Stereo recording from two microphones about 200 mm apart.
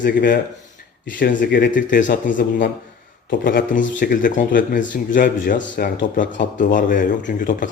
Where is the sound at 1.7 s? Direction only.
40° left (ahead or behind).